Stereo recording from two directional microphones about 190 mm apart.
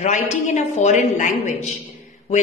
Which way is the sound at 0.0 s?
40° left (ahead or behind).